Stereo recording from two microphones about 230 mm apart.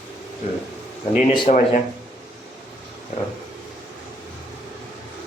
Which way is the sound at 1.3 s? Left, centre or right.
Left.